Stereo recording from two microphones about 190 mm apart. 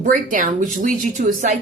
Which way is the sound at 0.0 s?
45° right (ahead or behind).